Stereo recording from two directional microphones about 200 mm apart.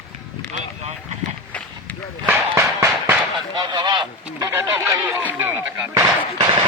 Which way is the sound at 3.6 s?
20° right (ahead or behind).